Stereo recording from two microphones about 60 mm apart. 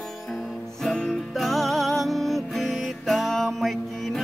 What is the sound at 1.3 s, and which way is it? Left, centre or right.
Music, centre.